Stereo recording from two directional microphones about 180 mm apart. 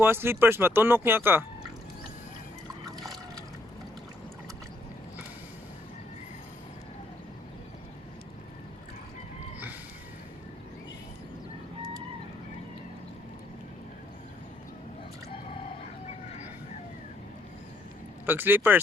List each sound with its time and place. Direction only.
0.0 s speech: 10° right (ahead or behind)
16.0 s vehicle: 40° left (ahead or behind)
18.3 s speech: 10° right (ahead or behind)